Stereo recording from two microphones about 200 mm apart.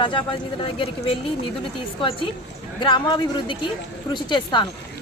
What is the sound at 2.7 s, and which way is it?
Speech, 25° left (ahead or behind).